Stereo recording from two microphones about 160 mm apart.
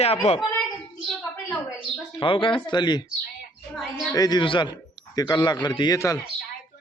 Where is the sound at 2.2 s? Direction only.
30° left (ahead or behind).